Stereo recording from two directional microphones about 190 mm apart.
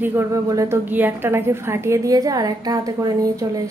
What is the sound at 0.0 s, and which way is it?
A woman's voice, 15° right (ahead or behind).